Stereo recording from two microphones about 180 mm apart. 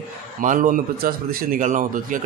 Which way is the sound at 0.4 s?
45° right (ahead or behind).